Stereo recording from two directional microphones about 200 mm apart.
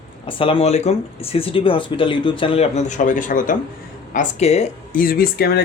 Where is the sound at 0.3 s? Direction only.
25° left (ahead or behind).